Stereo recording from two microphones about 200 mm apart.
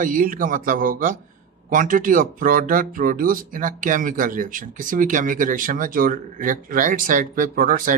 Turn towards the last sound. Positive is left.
turn(degrees=-45)  # may be behind; listen again after turning